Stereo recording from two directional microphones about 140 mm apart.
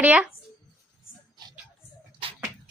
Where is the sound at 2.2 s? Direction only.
40° right (ahead or behind).